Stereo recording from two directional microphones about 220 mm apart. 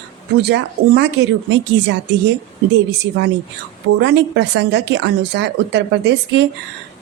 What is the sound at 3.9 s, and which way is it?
A woman's voice, 50° right (ahead or behind).